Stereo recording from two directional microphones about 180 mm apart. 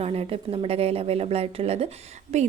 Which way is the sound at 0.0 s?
35° right (ahead or behind).